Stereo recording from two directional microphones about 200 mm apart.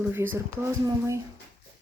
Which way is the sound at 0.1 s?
10° right (ahead or behind).